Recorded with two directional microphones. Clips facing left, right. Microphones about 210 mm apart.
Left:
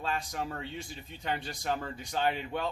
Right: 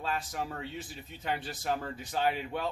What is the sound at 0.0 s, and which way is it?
Speech, 5° right (ahead or behind).